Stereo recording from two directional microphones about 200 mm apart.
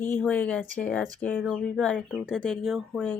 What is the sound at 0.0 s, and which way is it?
Speech, 10° left (ahead or behind).